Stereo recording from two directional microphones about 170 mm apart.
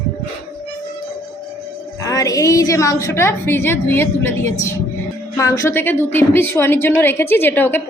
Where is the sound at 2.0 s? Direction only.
20° left (ahead or behind).